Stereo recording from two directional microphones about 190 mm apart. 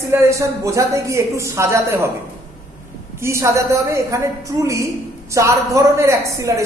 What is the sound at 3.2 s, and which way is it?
Speech, 15° right (ahead or behind).